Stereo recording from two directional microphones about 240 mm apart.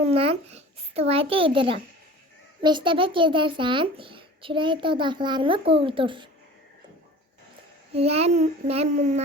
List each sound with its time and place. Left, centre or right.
0.0 s a child's voice: right
7.9 s a child's voice: right